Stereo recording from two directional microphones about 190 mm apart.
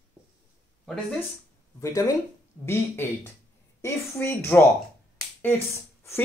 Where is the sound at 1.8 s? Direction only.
20° left (ahead or behind).